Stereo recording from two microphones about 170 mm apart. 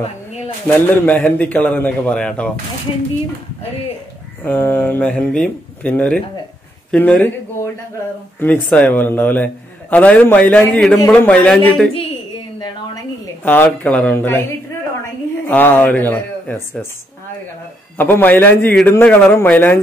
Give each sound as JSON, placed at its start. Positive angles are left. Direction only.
{"t": 0.7, "sound": "a man's voice", "side_deg": 10}
{"t": 4.4, "sound": "a man's voice", "side_deg": 10}
{"t": 11.9, "sound": "a sound", "side_deg": 35}
{"t": 12.9, "sound": "a sound", "side_deg": 10}
{"t": 13.7, "sound": "a man's voice", "side_deg": 5}
{"t": 15.4, "sound": "speech", "side_deg": 10}
{"t": 17.9, "sound": "a man's voice", "side_deg": 10}